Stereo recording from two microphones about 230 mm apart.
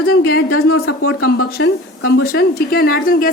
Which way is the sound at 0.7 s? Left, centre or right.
Left.